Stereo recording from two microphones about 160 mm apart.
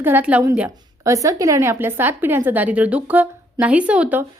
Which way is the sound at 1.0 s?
20° right (ahead or behind).